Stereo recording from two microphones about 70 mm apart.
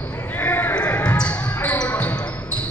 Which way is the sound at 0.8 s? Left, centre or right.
Centre.